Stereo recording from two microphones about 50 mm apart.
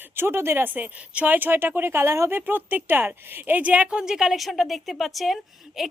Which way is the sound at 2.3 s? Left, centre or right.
Right.